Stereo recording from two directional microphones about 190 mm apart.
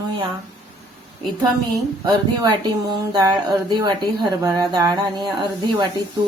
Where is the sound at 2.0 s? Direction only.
20° right (ahead or behind).